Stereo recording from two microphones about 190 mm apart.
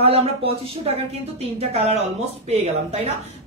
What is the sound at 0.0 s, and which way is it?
Speech, 30° right (ahead or behind).